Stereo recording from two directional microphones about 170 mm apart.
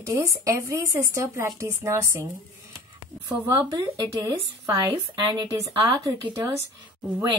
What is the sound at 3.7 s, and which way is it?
Speech, 25° right (ahead or behind).